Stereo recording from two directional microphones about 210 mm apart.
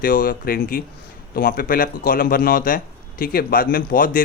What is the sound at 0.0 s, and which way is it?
Speech, 45° left (ahead or behind).